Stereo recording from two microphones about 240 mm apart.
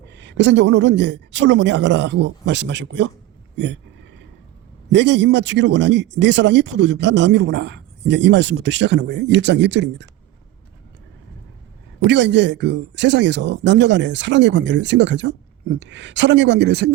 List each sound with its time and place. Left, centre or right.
0.0 s speech: right
4.9 s speech: right
11.9 s speech: right